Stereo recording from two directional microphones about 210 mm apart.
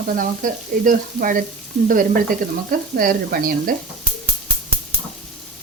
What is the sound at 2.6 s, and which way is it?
Speech, 45° right (ahead or behind).